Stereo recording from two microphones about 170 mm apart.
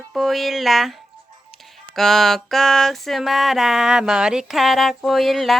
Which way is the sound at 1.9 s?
Centre (ahead or behind).